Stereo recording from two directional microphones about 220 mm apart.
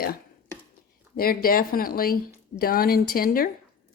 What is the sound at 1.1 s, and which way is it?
Speech, 40° left (ahead or behind).